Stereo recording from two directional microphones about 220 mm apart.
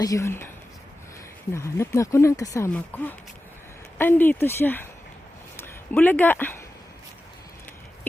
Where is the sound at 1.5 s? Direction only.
10° left (ahead or behind).